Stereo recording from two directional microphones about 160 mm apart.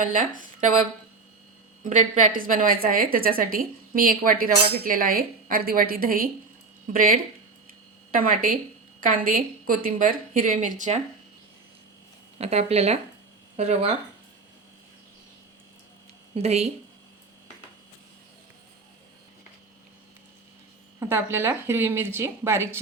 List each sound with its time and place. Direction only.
1.8 s a woman's voice: 55° right (ahead or behind)
12.4 s speech: 40° right (ahead or behind)
16.3 s speech: 40° right (ahead or behind)
21.0 s a woman's voice: 15° right (ahead or behind)